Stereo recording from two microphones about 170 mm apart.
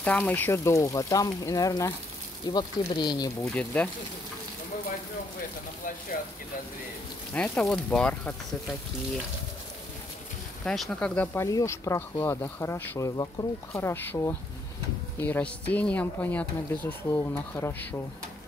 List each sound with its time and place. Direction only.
0.0 s speech: 10° left (ahead or behind)
3.4 s speech: 5° left (ahead or behind)
7.3 s speech: 5° left (ahead or behind)
10.6 s speech: 5° left (ahead or behind)
11.4 s speech: 20° left (ahead or behind)